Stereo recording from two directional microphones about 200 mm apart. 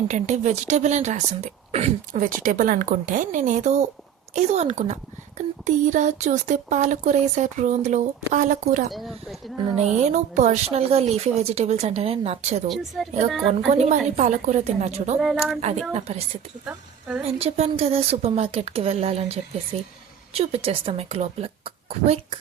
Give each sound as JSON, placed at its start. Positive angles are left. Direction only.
{"t": 0.1, "sound": "speech", "side_deg": -35}
{"t": 8.9, "sound": "speech", "side_deg": 0}
{"t": 9.7, "sound": "speech", "side_deg": -35}
{"t": 12.6, "sound": "speech", "side_deg": 0}
{"t": 13.7, "sound": "speech", "side_deg": -35}
{"t": 15.2, "sound": "speech", "side_deg": 0}
{"t": 15.9, "sound": "speech", "side_deg": -30}
{"t": 16.6, "sound": "a woman's voice", "side_deg": -10}
{"t": 17.2, "sound": "a woman's voice", "side_deg": -30}